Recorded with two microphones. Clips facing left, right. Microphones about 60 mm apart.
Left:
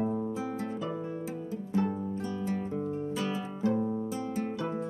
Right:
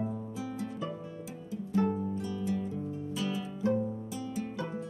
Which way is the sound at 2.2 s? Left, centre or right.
Left.